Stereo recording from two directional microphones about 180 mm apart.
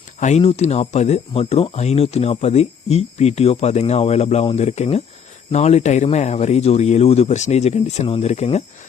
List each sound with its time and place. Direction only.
0.2 s speech: 40° left (ahead or behind)